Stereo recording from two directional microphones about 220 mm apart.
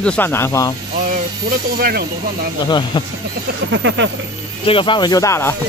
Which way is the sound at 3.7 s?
60° right (ahead or behind).